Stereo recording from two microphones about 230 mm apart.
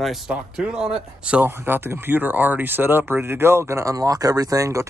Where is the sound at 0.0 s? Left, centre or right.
Centre.